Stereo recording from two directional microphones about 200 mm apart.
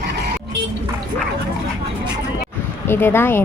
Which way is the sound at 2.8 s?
10° left (ahead or behind).